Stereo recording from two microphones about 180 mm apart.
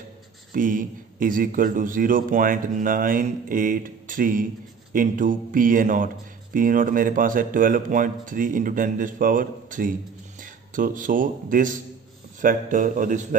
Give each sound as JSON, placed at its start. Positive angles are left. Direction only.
{"t": 0.5, "sound": "a man's voice", "side_deg": -50}